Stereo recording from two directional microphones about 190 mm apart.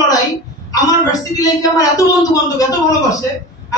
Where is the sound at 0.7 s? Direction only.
20° left (ahead or behind).